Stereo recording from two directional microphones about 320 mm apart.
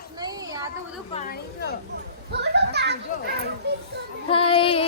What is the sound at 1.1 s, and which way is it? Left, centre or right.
Speech, left.